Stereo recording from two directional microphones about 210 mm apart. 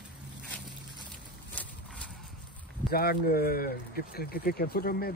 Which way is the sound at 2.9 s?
45° left (ahead or behind).